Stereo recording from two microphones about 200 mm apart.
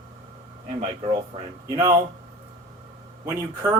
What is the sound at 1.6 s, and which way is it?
Speech, 25° right (ahead or behind).